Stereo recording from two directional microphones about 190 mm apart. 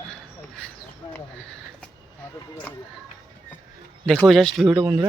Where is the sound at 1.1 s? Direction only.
5° left (ahead or behind).